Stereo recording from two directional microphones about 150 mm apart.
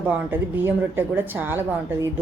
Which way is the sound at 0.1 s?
15° right (ahead or behind).